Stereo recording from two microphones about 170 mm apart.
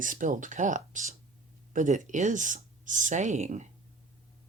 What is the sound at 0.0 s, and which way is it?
A woman's voice, 50° right (ahead or behind).